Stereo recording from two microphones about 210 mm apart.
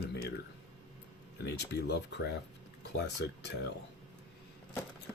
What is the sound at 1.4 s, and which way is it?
Speech, 55° left (ahead or behind).